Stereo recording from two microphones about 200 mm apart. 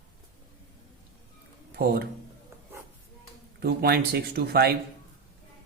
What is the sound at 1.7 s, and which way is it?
Speech, 50° right (ahead or behind).